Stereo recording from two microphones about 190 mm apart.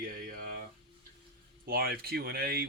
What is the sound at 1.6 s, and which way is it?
Speech, 55° right (ahead or behind).